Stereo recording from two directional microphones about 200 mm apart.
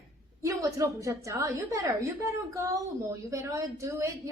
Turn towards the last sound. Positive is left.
turn(degrees=-15)  # may be behind; listen again after turning